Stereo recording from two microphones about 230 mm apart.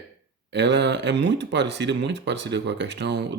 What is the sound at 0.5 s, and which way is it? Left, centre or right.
Speech, right.